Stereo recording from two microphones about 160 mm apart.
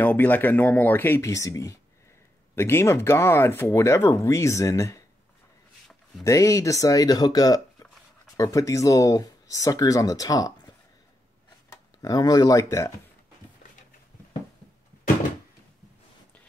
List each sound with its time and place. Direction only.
0.0 s speech: 10° left (ahead or behind)
6.2 s speech: 20° left (ahead or behind)
12.0 s speech: 25° left (ahead or behind)